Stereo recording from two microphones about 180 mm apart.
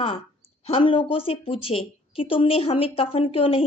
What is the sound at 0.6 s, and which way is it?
A woman's voice, 30° left (ahead or behind).